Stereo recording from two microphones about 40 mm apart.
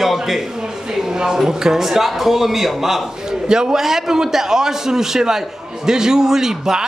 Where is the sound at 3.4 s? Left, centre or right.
Centre.